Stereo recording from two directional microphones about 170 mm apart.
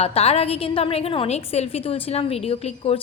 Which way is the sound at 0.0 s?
35° left (ahead or behind).